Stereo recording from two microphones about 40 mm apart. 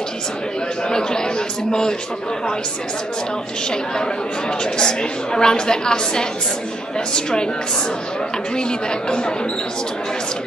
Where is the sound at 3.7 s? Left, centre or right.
Centre.